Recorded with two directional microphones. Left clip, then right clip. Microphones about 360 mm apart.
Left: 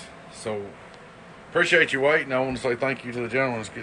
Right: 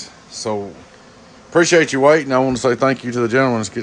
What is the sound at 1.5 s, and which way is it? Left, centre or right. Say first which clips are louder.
Speech: right 6 dB; centre.